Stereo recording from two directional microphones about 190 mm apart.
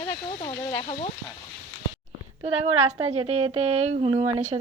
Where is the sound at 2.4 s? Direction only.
30° right (ahead or behind).